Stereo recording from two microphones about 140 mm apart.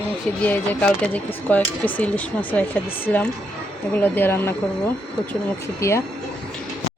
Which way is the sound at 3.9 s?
15° left (ahead or behind).